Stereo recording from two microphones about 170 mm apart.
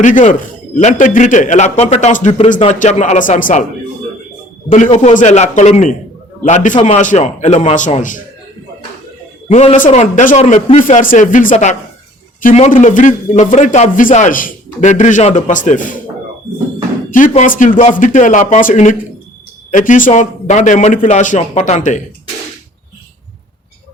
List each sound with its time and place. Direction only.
0.0 s a man's voice: 45° left (ahead or behind)
4.7 s a man's voice: 45° left (ahead or behind)
9.5 s a man's voice: 45° left (ahead or behind)
17.1 s a man's voice: 50° left (ahead or behind)